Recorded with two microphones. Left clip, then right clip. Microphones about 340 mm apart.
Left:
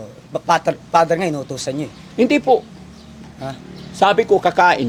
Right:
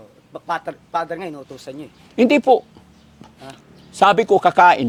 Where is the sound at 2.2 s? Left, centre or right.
Right.